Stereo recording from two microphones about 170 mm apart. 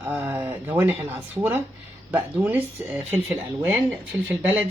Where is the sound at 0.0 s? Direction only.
10° right (ahead or behind).